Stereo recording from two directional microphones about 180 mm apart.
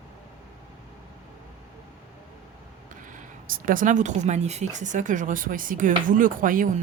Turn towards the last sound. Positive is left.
turn(degrees=-50)  # may be behind; listen again after turning